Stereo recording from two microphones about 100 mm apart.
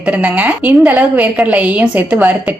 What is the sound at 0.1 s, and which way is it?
A woman's voice, 15° right (ahead or behind).